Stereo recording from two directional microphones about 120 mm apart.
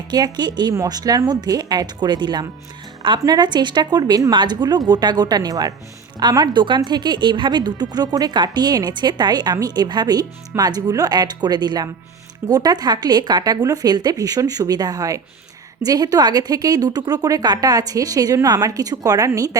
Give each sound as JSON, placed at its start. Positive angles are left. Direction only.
{"t": 0.1, "sound": "a woman's voice", "side_deg": -35}